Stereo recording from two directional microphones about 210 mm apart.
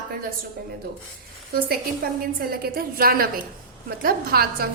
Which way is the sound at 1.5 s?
45° right (ahead or behind).